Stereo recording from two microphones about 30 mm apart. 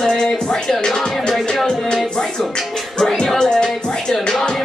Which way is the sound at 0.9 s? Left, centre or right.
Centre.